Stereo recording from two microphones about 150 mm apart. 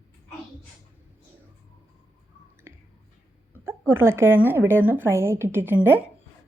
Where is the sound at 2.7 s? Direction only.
15° right (ahead or behind).